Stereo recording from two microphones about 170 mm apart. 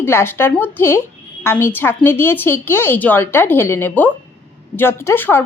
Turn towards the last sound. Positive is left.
turn(degrees=10)  # may be behind; listen again after turning